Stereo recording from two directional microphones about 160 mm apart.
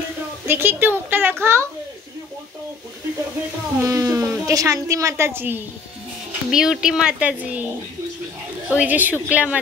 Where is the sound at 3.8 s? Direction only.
20° right (ahead or behind).